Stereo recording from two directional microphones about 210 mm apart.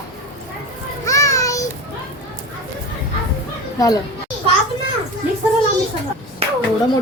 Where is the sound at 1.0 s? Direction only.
15° left (ahead or behind).